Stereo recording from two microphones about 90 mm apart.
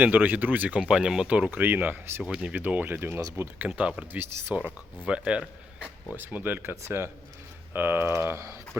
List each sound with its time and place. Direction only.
0.0 s speech: 20° right (ahead or behind)
6.1 s speech: 20° right (ahead or behind)